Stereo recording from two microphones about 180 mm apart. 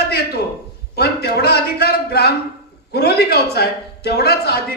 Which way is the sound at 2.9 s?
65° left (ahead or behind).